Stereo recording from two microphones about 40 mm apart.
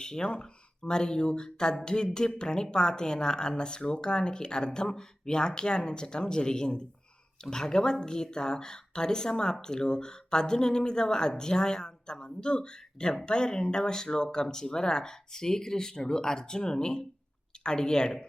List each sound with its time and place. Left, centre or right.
0.0 s speech: centre